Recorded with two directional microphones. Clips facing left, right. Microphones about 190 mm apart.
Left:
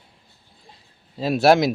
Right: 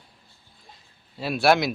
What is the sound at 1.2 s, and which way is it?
Speech, 40° left (ahead or behind).